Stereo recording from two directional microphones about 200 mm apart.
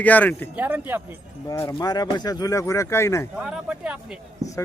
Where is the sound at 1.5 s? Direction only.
15° left (ahead or behind).